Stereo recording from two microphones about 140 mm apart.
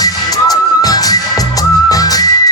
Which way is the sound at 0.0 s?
25° left (ahead or behind).